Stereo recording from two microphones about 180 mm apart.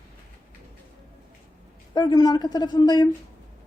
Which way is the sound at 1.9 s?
20° left (ahead or behind).